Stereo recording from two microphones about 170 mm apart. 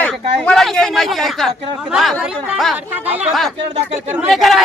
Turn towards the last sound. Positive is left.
turn(degrees=0)  # may be behind; listen again after turning